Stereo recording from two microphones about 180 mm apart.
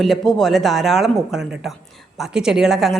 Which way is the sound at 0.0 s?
Centre (ahead or behind).